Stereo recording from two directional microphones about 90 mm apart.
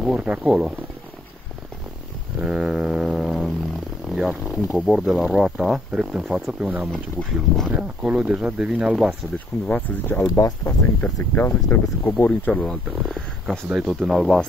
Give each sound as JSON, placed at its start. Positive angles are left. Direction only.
{"t": 0.0, "sound": "speech", "side_deg": -10}
{"t": 2.4, "sound": "a sound", "side_deg": -5}
{"t": 4.1, "sound": "speech", "side_deg": -5}
{"t": 6.9, "sound": "speech", "side_deg": 5}
{"t": 7.7, "sound": "speech", "side_deg": -10}
{"t": 9.7, "sound": "speech", "side_deg": 20}
{"t": 10.2, "sound": "speech", "side_deg": 40}
{"t": 11.3, "sound": "speech", "side_deg": 20}
{"t": 12.9, "sound": "speech", "side_deg": -5}